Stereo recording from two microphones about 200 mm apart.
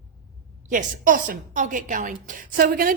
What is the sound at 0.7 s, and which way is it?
A woman's voice, 40° right (ahead or behind).